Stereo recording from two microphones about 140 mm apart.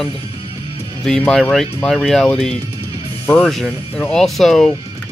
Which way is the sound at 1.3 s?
5° left (ahead or behind).